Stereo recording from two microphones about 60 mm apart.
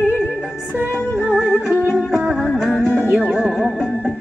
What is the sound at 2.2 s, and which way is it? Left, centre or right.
Music, centre.